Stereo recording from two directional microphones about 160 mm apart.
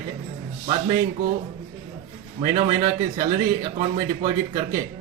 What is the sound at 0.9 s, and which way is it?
Speech, 55° right (ahead or behind).